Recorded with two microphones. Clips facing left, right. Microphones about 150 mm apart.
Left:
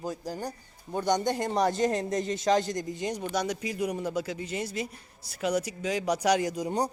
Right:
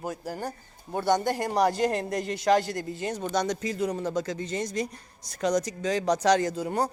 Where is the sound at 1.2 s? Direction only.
20° left (ahead or behind).